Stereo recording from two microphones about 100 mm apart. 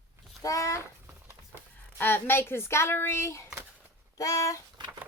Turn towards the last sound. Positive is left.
turn(degrees=-50)  # may be behind; listen again after turning